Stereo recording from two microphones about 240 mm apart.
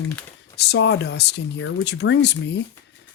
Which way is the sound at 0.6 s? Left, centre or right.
Left.